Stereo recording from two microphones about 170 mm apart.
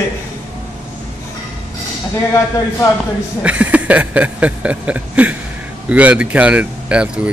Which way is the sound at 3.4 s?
10° right (ahead or behind).